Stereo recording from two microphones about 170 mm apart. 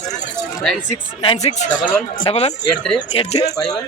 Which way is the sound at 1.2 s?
35° left (ahead or behind).